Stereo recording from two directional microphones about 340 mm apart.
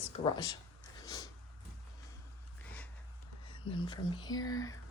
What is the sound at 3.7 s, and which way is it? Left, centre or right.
Speech, centre.